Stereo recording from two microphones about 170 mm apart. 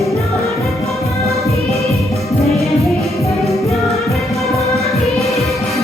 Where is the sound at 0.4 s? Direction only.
Centre (ahead or behind).